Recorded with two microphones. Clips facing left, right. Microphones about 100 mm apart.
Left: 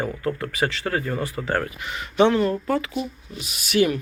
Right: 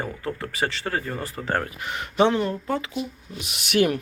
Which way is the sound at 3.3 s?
65° right (ahead or behind).